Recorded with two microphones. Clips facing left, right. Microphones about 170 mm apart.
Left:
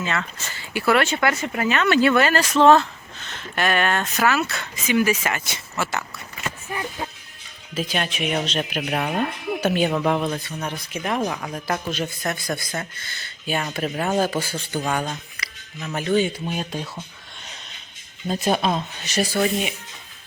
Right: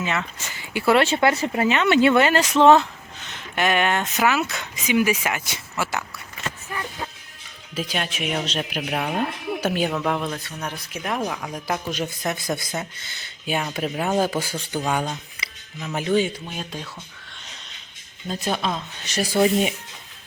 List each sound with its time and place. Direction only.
0.0 s speech: 15° right (ahead or behind)
7.9 s speech: centre (ahead or behind)
9.9 s speech: 10° left (ahead or behind)
11.9 s speech: 15° right (ahead or behind)
14.3 s speech: 15° right (ahead or behind)
16.5 s speech: 10° left (ahead or behind)
18.3 s speech: 10° left (ahead or behind)
19.2 s speech: 15° right (ahead or behind)